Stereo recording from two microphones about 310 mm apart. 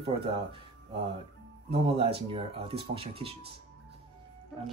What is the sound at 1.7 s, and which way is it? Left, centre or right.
Speech, centre.